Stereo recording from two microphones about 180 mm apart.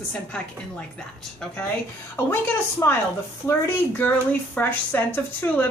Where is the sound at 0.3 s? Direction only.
5° left (ahead or behind).